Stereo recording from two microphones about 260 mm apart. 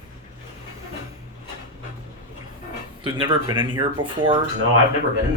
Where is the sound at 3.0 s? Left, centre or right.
Centre.